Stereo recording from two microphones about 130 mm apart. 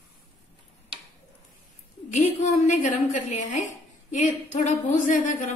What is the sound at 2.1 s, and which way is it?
A woman's voice, 70° left (ahead or behind).